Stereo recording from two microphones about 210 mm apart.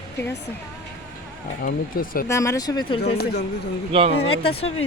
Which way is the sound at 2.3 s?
15° left (ahead or behind).